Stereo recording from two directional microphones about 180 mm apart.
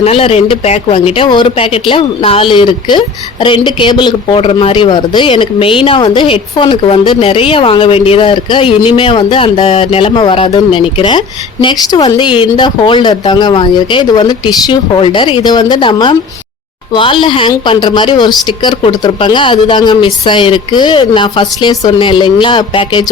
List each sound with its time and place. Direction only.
0.0 s speech: 30° left (ahead or behind)